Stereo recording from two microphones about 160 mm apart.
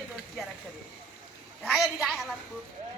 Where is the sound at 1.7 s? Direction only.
Centre (ahead or behind).